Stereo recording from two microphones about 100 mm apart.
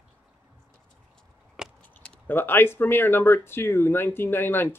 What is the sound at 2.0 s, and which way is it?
Speech, 20° left (ahead or behind).